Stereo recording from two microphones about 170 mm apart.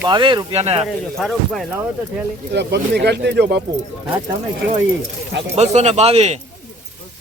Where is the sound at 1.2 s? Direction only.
Centre (ahead or behind).